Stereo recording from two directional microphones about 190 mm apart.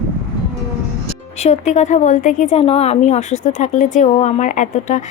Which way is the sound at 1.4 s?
35° left (ahead or behind).